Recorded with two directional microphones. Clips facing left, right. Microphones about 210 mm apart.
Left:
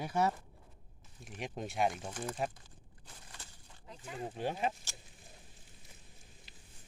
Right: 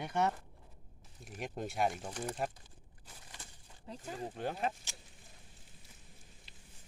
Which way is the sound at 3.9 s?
35° right (ahead or behind).